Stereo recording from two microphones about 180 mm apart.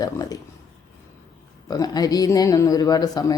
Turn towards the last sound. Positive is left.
turn(degrees=20)  # may be behind; listen again after turning